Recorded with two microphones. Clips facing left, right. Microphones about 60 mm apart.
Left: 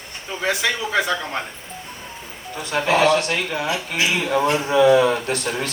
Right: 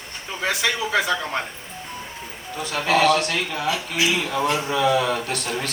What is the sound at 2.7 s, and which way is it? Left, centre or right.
A man's voice, left.